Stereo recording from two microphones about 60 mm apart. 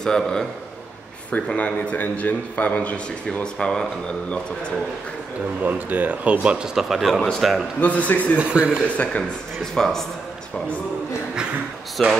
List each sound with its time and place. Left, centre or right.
0.0 s a man's voice: centre
1.5 s a man's voice: left
3.5 s a man's voice: centre
5.6 s speech: right; by 7.2 s centre
7.2 s a man's voice: centre
7.8 s a man's voice: left
8.4 s speech: centre
8.9 s a man's voice: left
9.6 s a man's voice: centre
12.0 s a man's voice: centre